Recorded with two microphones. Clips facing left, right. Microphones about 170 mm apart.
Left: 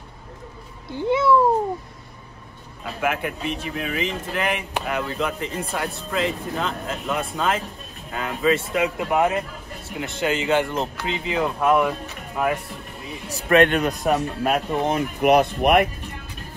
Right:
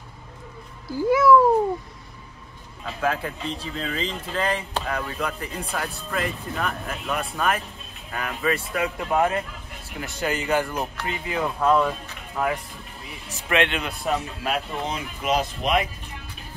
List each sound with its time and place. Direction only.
0.8 s a child's voice: 25° left (ahead or behind)
3.0 s speech: 15° left (ahead or behind)
13.3 s speech: 40° left (ahead or behind); by 15.9 s 60° left (ahead or behind)